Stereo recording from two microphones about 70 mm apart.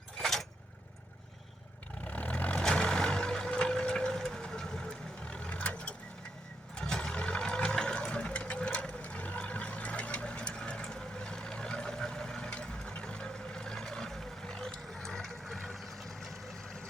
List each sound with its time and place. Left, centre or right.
0.2 s vehicle: centre
2.0 s vehicle: centre
6.7 s sewing machine: centre